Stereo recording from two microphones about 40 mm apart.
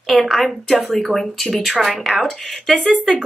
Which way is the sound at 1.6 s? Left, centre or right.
Centre.